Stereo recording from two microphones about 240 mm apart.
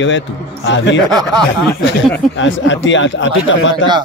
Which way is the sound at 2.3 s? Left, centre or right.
Left.